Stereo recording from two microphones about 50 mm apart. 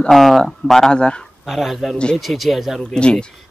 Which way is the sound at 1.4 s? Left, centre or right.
Centre.